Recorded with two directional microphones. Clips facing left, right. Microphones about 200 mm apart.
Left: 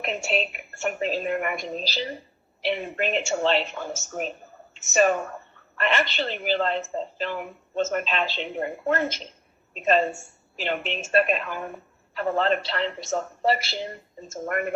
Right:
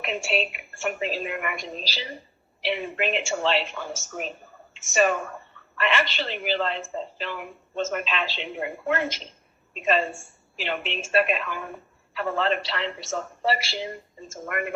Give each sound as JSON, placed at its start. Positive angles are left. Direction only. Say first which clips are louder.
{"t": 0.0, "sound": "a woman's voice", "louder": "even", "side_deg": 40}